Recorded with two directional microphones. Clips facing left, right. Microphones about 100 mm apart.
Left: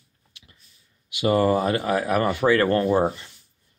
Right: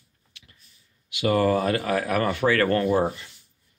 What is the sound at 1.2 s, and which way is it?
Speech, 25° left (ahead or behind).